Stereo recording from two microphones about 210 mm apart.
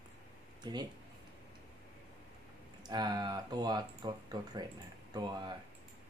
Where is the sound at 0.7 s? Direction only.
20° right (ahead or behind).